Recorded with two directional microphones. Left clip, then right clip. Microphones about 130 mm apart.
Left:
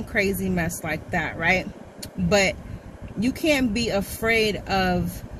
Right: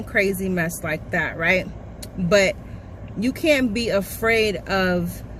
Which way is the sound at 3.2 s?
40° right (ahead or behind).